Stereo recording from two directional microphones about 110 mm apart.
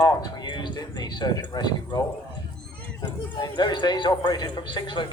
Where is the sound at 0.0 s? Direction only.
40° left (ahead or behind).